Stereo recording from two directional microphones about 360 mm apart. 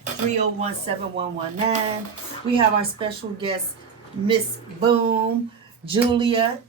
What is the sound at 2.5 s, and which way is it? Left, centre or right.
Speech, centre.